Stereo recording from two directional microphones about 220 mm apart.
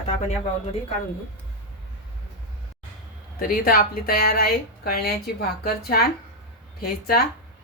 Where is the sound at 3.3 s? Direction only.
40° left (ahead or behind).